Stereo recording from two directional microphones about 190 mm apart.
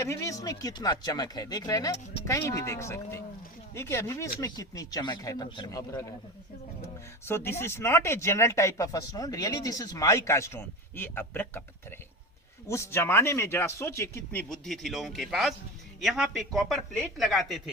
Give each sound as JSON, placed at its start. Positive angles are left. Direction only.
{"t": 0.0, "sound": "speech", "side_deg": 15}
{"t": 7.3, "sound": "speech", "side_deg": 10}
{"t": 14.5, "sound": "speech", "side_deg": 0}